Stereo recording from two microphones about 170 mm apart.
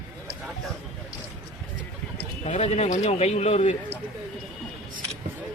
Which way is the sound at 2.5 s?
40° left (ahead or behind).